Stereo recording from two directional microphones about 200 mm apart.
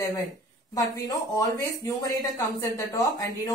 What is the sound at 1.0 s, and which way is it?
A woman's voice, 20° left (ahead or behind).